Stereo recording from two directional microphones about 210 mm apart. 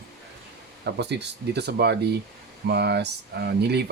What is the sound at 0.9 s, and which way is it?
Speech, 55° right (ahead or behind).